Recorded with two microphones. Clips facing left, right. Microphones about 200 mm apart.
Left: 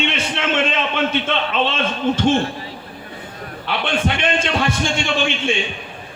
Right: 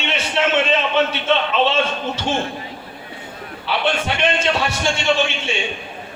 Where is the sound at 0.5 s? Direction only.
50° left (ahead or behind).